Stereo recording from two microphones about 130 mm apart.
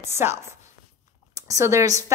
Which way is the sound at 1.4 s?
25° right (ahead or behind).